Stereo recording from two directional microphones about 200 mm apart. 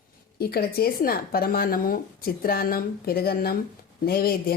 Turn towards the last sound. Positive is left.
turn(degrees=50)  # may be behind; listen again after turning